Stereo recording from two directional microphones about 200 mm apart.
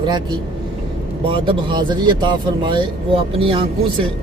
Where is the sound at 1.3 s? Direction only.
25° right (ahead or behind).